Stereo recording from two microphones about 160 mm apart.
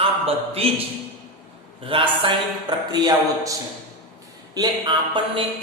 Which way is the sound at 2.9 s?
25° right (ahead or behind).